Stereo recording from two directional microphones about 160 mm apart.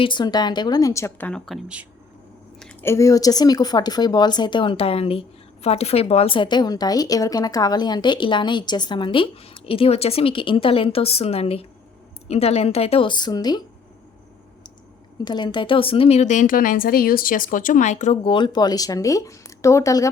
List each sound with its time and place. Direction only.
0.0 s speech: 30° left (ahead or behind)
1.3 s speech: centre (ahead or behind)
2.8 s a woman's voice: 20° left (ahead or behind)
15.2 s a woman's voice: 25° left (ahead or behind); by 18.2 s 50° left (ahead or behind)
18.2 s speech: 30° left (ahead or behind)